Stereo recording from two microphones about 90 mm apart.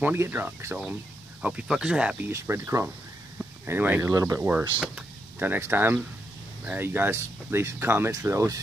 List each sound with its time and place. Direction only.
0.0 s speech: 25° right (ahead or behind)
1.4 s speech: 10° right (ahead or behind)
2.2 s speech: 25° right (ahead or behind)
4.0 s speech: 35° right (ahead or behind)
4.5 s speech: 15° right (ahead or behind); by 8.5 s 35° right (ahead or behind)